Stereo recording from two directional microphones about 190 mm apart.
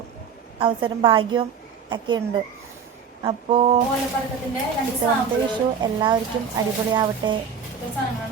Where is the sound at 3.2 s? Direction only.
25° right (ahead or behind).